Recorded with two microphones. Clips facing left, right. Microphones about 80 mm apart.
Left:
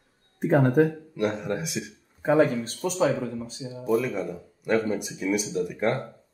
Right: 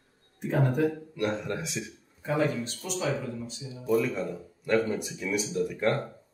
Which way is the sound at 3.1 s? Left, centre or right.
Left.